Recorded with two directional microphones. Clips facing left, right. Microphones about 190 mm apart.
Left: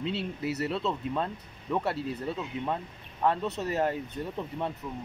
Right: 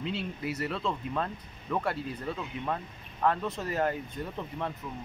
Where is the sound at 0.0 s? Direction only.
30° left (ahead or behind).